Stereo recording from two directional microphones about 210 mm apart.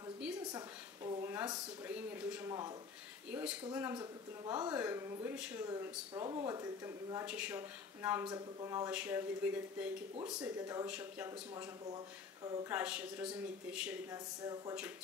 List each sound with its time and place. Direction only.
0.4 s a sound: 15° right (ahead or behind)
1.9 s speech: 5° right (ahead or behind)
5.7 s speech: 15° right (ahead or behind)
14.1 s speech: 15° right (ahead or behind)